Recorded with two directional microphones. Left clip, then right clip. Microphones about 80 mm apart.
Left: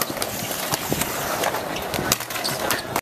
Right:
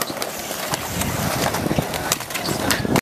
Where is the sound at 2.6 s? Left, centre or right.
Right.